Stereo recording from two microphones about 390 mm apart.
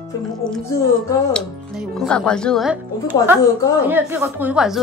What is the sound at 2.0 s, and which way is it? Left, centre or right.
A woman's voice, centre.